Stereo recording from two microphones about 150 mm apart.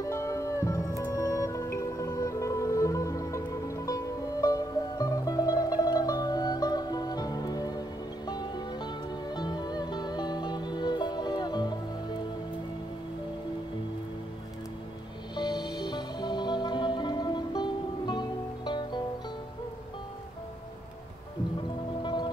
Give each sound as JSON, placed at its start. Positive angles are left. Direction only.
{"t": 0.0, "sound": "music", "side_deg": 20}
{"t": 15.3, "sound": "music", "side_deg": 30}
{"t": 22.0, "sound": "music", "side_deg": 30}